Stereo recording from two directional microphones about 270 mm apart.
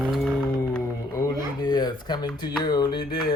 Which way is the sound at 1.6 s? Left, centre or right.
Centre.